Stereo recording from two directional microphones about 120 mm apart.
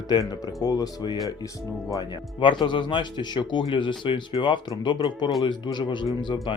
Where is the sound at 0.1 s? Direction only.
35° left (ahead or behind).